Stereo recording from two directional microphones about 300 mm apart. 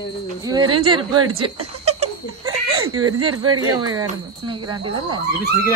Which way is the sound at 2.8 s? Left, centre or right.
Right.